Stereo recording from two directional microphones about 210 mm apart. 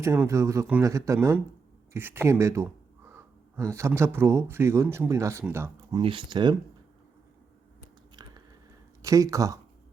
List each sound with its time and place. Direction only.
0.0 s speech: 15° right (ahead or behind)
6.0 s speech: 25° right (ahead or behind)
8.1 s biting: 20° right (ahead or behind)
9.0 s speech: 15° right (ahead or behind)